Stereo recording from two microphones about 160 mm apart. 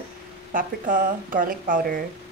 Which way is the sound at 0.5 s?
55° right (ahead or behind).